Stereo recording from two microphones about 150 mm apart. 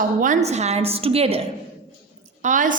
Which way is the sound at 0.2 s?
55° right (ahead or behind).